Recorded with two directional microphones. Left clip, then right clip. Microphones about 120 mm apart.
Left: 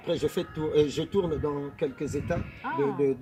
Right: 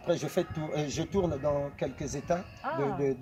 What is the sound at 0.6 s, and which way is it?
A man's voice, 30° right (ahead or behind).